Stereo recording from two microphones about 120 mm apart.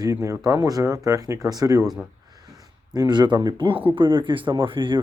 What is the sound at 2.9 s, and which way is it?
Speech, 35° right (ahead or behind).